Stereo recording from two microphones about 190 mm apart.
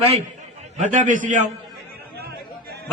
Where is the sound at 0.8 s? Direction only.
40° right (ahead or behind).